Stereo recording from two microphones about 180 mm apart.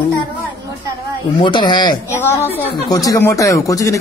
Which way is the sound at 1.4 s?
25° left (ahead or behind).